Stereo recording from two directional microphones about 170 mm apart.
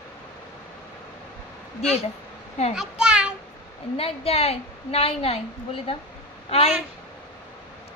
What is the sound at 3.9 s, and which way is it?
A woman's voice, 35° left (ahead or behind).